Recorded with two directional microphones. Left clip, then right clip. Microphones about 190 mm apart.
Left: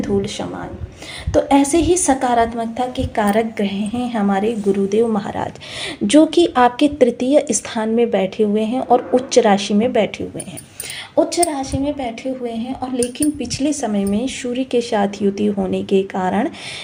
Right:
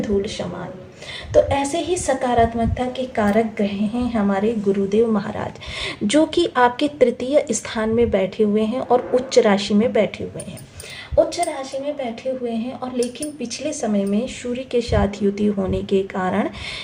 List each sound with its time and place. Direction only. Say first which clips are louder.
0.0 s a woman's voice: left 1 dB; 30° left (ahead or behind); by 10.2 s 15° left (ahead or behind)
11.3 s a woman's voice: left 4 dB; 35° left (ahead or behind); by 16.5 s 15° left (ahead or behind)